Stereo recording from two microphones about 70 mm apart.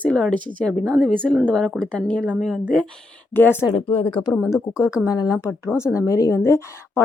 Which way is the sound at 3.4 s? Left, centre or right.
Left.